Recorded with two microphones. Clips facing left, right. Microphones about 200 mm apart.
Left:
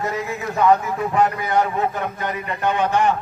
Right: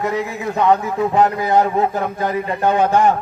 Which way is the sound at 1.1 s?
35° right (ahead or behind).